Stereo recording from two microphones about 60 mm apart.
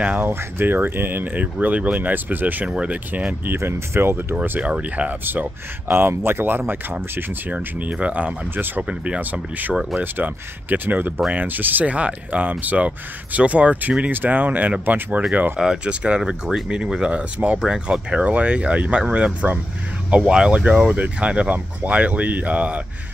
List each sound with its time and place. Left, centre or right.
0.0 s speech: right
2.7 s speech: centre
3.1 s speech: right
4.4 s speech: right
7.5 s speech: right
8.5 s speech: right
8.8 s speech: centre
9.2 s speech: right
15.6 s speech: centre
16.2 s speech: centre; by 22.8 s right